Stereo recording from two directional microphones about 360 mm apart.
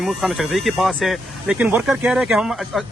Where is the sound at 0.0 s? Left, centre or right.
Centre.